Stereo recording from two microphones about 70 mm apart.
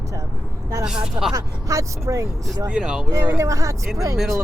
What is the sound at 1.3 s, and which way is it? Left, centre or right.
Speech, right.